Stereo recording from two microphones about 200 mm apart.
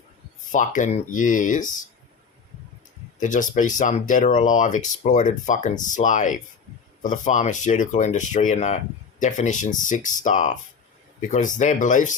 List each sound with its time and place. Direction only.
0.5 s speech: 40° left (ahead or behind)
3.2 s speech: 40° left (ahead or behind)